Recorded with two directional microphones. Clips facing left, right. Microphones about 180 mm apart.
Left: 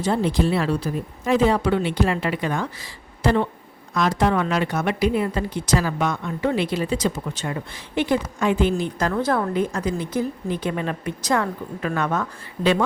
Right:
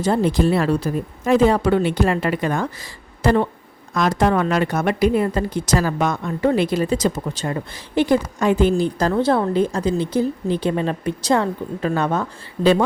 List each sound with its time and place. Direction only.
0.0 s a woman's voice: 45° right (ahead or behind)